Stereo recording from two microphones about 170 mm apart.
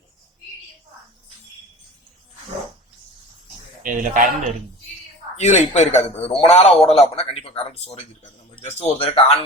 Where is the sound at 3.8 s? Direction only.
50° right (ahead or behind).